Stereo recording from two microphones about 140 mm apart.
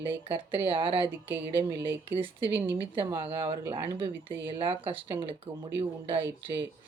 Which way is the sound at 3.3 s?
30° right (ahead or behind).